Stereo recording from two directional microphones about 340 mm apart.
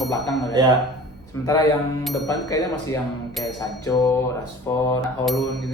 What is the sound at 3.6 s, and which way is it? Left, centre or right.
Speech, centre.